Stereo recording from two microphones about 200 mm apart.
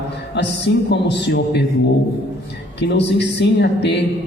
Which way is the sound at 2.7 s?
60° left (ahead or behind).